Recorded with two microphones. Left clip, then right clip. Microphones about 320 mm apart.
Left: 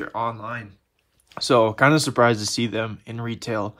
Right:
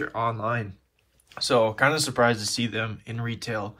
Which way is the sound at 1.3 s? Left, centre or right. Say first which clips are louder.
Left 4 dB; left.